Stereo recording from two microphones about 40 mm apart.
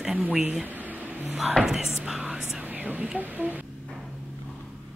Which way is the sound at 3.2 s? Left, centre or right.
Right.